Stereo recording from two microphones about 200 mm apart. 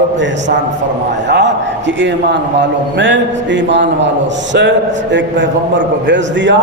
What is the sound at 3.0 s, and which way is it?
A man's voice, 65° right (ahead or behind).